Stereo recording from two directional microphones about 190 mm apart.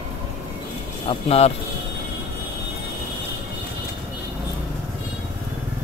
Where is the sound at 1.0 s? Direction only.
30° left (ahead or behind).